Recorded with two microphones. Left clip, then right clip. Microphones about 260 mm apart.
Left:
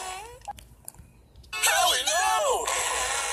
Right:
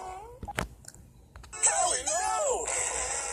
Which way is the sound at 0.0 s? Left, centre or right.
Left.